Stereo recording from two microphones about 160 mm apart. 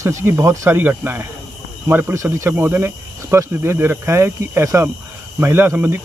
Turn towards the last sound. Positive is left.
turn(degrees=-15)  # may be behind; listen again after turning